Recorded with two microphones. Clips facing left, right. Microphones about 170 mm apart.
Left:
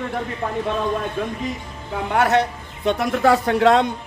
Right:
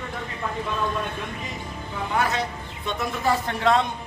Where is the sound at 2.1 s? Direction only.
70° left (ahead or behind).